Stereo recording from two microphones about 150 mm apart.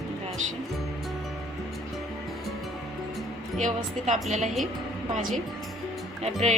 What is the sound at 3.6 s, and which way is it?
Speech, 50° right (ahead or behind).